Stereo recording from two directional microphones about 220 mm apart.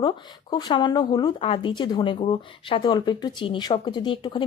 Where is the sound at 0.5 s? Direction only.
20° left (ahead or behind).